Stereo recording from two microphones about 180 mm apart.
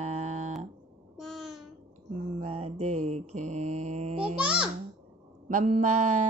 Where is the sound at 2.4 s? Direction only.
35° right (ahead or behind).